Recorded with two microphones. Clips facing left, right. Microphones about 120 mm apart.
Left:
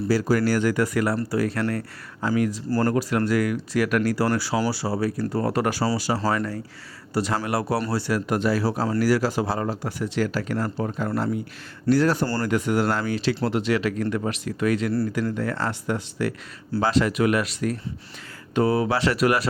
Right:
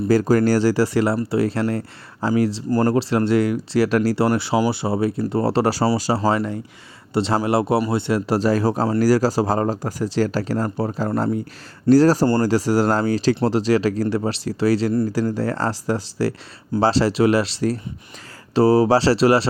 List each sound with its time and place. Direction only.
0.1 s speech: 45° right (ahead or behind)
6.2 s speech: 20° right (ahead or behind); by 12.2 s 35° right (ahead or behind)
12.2 s speech: 25° right (ahead or behind)